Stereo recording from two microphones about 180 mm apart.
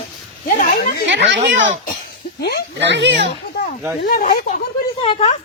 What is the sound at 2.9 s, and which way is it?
Speech, 75° right (ahead or behind).